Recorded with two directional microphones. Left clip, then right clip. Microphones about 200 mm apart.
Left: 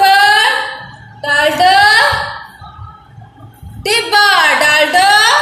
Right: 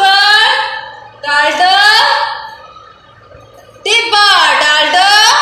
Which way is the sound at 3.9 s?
35° left (ahead or behind).